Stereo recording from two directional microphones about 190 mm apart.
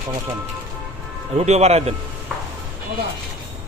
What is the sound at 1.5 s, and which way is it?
Speech, 35° right (ahead or behind).